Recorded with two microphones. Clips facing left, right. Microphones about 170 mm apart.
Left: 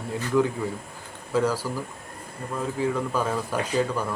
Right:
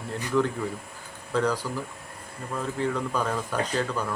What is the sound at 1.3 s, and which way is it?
Speech, 10° left (ahead or behind).